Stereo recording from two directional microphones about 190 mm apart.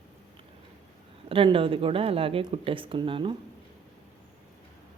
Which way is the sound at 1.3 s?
30° right (ahead or behind).